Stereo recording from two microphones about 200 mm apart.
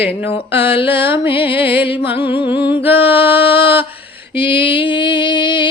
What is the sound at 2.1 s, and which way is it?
Music, 10° right (ahead or behind).